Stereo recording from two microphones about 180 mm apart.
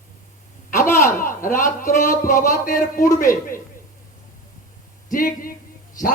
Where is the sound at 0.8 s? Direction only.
15° left (ahead or behind).